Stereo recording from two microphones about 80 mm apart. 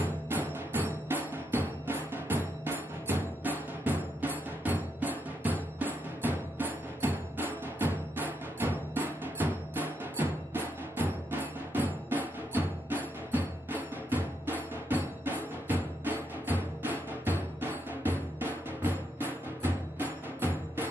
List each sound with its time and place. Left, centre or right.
0.0 s music: right